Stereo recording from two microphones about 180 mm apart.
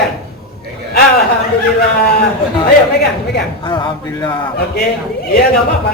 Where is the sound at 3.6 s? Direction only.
25° left (ahead or behind).